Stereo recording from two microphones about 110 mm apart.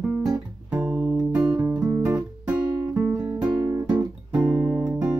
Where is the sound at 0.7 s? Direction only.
20° right (ahead or behind).